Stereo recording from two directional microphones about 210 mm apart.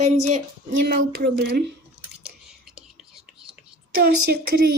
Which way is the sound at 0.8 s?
45° right (ahead or behind).